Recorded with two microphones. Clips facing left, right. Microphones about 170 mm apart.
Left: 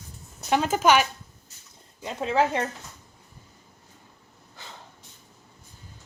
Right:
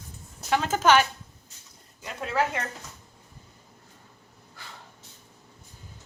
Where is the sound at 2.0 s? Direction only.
25° left (ahead or behind).